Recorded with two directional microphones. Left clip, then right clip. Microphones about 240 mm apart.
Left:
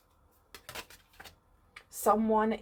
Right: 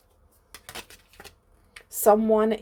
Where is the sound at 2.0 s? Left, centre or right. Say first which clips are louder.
Right 8 dB; right.